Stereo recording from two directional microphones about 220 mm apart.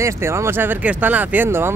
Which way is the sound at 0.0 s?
10° right (ahead or behind).